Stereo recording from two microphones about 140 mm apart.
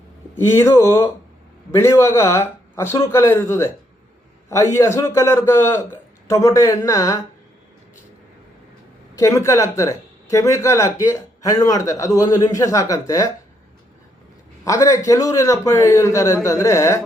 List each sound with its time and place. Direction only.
0.5 s speech: 20° left (ahead or behind)
9.1 s speech: 20° left (ahead or behind)
14.6 s speech: 25° left (ahead or behind)